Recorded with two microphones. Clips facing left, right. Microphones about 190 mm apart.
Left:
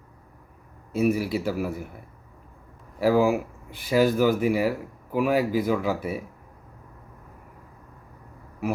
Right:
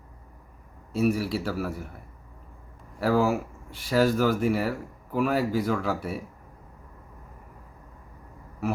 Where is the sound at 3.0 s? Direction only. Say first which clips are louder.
Left 3 dB; 5° left (ahead or behind).